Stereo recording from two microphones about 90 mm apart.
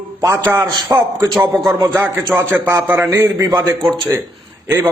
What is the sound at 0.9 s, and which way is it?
A man's voice, 35° right (ahead or behind).